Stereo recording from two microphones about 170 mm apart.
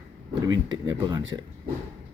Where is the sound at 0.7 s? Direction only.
20° right (ahead or behind).